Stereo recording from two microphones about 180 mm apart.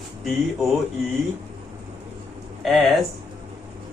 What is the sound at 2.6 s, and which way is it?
Speech, centre (ahead or behind).